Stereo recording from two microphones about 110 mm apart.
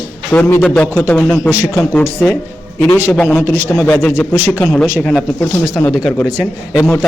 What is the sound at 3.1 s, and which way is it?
Speech, 10° left (ahead or behind).